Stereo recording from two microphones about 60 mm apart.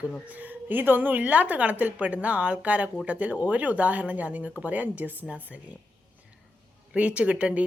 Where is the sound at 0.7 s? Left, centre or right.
Right.